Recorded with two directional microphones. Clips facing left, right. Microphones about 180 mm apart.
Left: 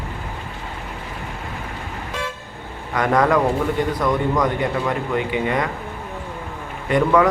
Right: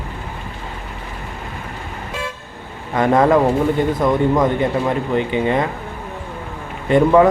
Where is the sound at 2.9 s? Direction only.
25° right (ahead or behind).